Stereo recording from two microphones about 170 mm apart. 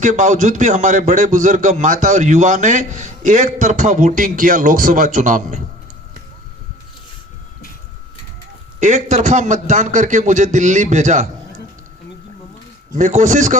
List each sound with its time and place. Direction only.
0.0 s a man's voice: 45° right (ahead or behind)
8.8 s a man's voice: 45° right (ahead or behind)
13.0 s a man's voice: 45° right (ahead or behind)